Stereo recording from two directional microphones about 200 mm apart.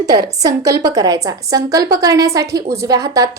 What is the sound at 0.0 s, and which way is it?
A woman's voice, 20° right (ahead or behind).